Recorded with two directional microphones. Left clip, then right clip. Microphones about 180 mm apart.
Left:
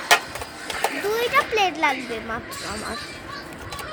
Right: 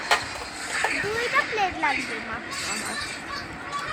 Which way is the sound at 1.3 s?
25° left (ahead or behind).